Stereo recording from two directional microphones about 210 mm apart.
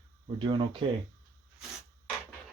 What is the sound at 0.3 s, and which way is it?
Speech, 25° right (ahead or behind).